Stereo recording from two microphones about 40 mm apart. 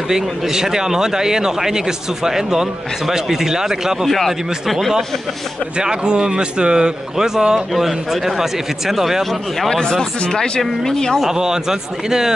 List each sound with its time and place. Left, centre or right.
0.1 s speech: centre
5.8 s speech: right; by 9.7 s centre
9.7 s speech: centre
10.6 s speech: centre
11.2 s speech: centre